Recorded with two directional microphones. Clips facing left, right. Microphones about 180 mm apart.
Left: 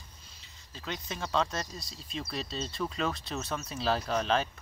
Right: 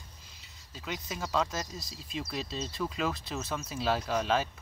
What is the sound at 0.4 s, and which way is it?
Speech, 5° right (ahead or behind).